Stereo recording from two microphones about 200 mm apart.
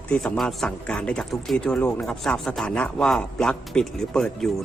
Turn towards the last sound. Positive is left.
turn(degrees=5)  # may be behind; listen again after turning